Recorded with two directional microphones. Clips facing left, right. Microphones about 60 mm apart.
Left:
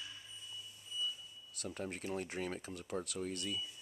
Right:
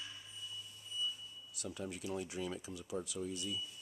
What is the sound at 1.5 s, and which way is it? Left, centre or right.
Speech, left.